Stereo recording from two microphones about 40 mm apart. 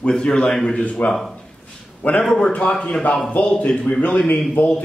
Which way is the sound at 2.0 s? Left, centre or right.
Left.